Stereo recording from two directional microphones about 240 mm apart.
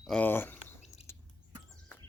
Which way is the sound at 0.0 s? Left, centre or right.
Centre.